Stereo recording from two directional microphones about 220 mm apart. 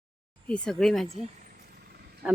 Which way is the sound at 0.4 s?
5° left (ahead or behind).